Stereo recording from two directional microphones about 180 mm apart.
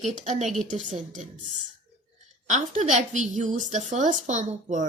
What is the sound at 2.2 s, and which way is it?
A woman's voice, 45° right (ahead or behind).